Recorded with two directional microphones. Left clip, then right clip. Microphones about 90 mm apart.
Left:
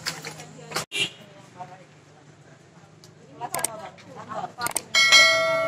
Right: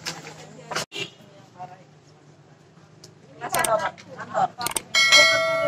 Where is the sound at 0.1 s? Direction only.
30° right (ahead or behind).